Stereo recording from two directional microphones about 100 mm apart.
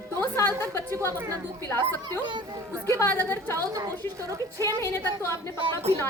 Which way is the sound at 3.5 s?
35° right (ahead or behind).